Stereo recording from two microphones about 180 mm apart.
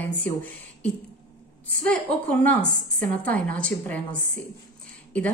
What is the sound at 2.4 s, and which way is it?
Speech, 10° left (ahead or behind).